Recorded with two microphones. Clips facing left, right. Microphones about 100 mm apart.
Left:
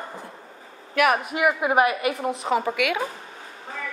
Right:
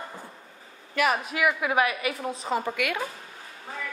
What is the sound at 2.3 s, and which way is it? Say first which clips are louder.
Speech: left 5 dB; 75° left (ahead or behind).